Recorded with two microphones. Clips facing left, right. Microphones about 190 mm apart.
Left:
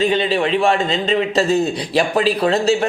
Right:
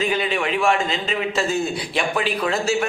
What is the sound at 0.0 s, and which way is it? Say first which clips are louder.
A man's voice: left 5 dB; 30° left (ahead or behind).